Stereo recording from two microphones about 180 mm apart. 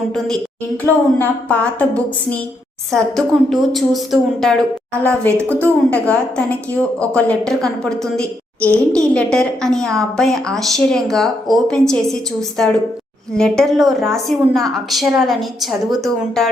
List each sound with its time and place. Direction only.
0.9 s a woman's voice: 15° left (ahead or behind)